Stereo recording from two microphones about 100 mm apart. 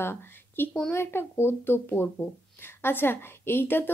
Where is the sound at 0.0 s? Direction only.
20° left (ahead or behind).